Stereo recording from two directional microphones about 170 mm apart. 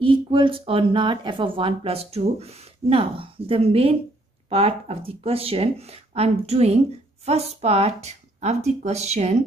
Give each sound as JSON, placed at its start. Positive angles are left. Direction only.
{"t": 0.0, "sound": "speech", "side_deg": -30}